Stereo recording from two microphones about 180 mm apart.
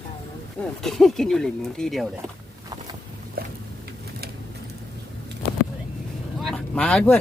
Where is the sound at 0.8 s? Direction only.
Centre (ahead or behind).